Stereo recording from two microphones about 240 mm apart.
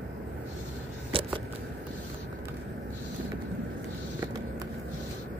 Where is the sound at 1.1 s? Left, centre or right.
Right.